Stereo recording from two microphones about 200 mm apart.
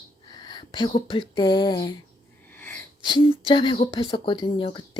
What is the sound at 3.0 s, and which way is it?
Speech, 25° left (ahead or behind).